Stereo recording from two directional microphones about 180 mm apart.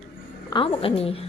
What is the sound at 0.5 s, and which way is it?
Speech, 30° left (ahead or behind).